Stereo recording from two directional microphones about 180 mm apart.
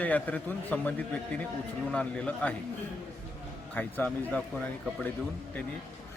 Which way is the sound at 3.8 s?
10° left (ahead or behind).